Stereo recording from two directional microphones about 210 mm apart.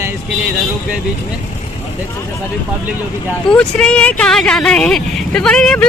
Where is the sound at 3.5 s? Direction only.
5° left (ahead or behind).